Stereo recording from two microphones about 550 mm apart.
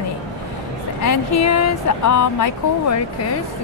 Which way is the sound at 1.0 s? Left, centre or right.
Left.